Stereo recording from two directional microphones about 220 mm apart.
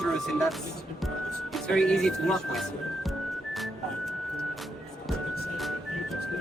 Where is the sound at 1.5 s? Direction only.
5° left (ahead or behind).